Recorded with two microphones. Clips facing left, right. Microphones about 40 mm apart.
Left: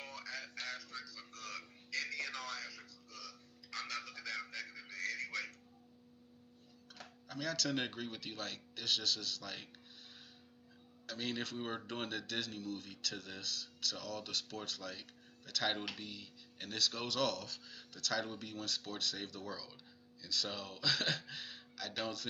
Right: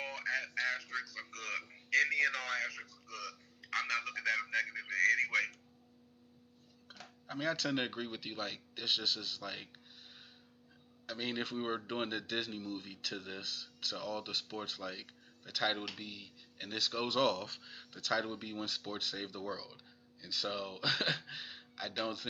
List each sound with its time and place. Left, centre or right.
0.0 s music: right
1.9 s speech: right
7.3 s speech: right
11.0 s speech: centre